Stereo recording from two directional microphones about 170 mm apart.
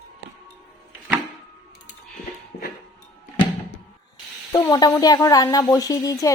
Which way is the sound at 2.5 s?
50° left (ahead or behind).